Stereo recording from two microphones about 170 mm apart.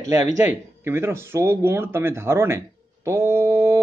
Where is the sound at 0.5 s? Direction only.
15° right (ahead or behind).